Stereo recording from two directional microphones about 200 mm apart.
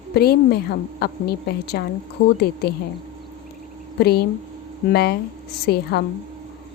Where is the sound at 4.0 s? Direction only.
55° left (ahead or behind).